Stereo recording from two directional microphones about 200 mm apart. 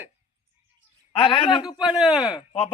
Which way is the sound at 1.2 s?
25° left (ahead or behind).